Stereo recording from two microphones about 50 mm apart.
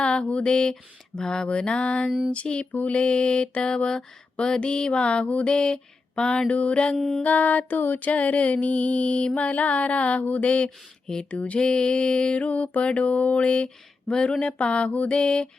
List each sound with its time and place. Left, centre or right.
0.0 s a sound: left
1.5 s mantra: centre
6.9 s music: centre
7.2 s mantra: left
11.6 s mantra: centre